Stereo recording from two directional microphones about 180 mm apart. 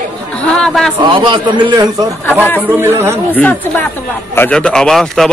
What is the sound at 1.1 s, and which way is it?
A man's voice, 30° right (ahead or behind).